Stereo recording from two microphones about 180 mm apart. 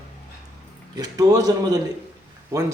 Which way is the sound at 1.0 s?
20° right (ahead or behind).